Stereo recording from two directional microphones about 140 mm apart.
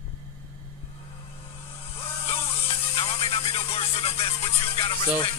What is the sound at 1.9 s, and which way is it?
Music, 45° left (ahead or behind).